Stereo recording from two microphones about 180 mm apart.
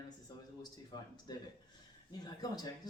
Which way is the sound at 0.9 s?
25° left (ahead or behind).